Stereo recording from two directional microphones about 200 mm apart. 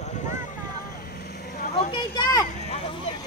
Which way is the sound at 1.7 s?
30° left (ahead or behind).